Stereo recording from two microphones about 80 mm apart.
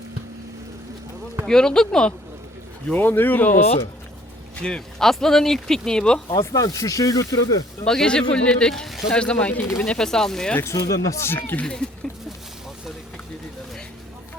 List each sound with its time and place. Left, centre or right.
1.5 s speech: centre
2.9 s speech: left
4.6 s speech: centre
6.3 s speech: left
7.9 s speech: centre
10.6 s speech: left
11.3 s speech: left
11.6 s speech: centre